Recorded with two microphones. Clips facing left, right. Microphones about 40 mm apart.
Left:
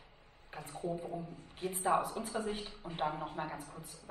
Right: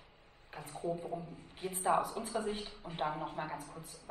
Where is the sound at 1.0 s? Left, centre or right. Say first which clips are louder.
Even; centre.